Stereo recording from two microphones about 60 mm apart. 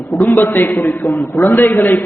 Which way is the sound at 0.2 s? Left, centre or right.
Left.